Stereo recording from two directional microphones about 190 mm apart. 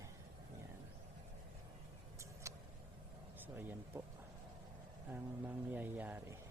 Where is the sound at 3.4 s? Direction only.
10° right (ahead or behind).